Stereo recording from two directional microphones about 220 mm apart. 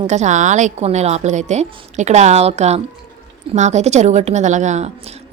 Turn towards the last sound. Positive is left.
turn(degrees=-30)  # may be behind; listen again after turning